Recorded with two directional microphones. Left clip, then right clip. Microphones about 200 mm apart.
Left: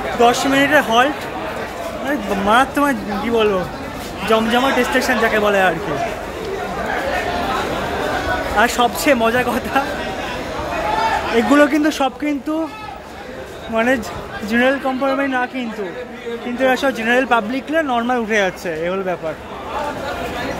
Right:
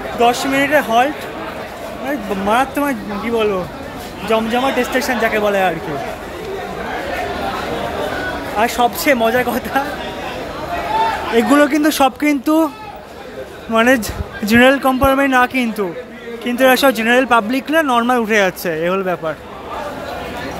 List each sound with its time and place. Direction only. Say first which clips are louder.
0.2 s a man's voice: even; 5° right (ahead or behind)
8.5 s a man's voice: right 1 dB; 10° right (ahead or behind)
11.3 s speech: right 1 dB; 10° right (ahead or behind)
13.7 s speech: right 4 dB; 30° right (ahead or behind)